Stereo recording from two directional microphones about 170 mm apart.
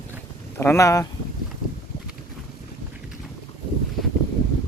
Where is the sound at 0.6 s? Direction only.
15° left (ahead or behind).